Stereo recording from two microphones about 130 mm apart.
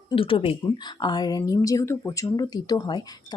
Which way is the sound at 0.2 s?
45° left (ahead or behind).